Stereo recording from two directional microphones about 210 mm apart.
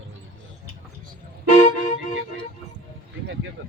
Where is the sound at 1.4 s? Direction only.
30° left (ahead or behind).